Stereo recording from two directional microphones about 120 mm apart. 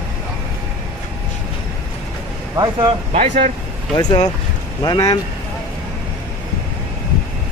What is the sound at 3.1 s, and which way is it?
Speech, 90° right.